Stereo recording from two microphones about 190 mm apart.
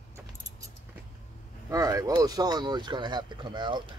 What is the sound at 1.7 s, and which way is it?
Speech, 20° right (ahead or behind).